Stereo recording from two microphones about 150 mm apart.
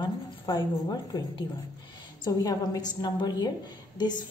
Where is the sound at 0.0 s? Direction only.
30° left (ahead or behind).